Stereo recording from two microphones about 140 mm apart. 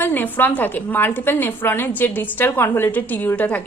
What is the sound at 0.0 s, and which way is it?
A woman's voice, 15° left (ahead or behind).